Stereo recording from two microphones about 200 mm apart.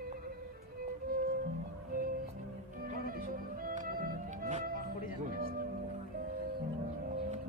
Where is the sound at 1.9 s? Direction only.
45° right (ahead or behind).